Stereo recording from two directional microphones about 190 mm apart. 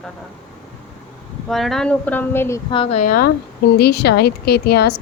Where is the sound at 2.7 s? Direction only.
30° left (ahead or behind).